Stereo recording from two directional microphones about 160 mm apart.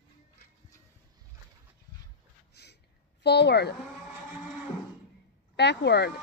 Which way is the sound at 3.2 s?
90° left.